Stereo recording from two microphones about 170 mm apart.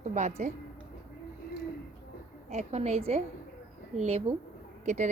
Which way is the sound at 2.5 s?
40° right (ahead or behind).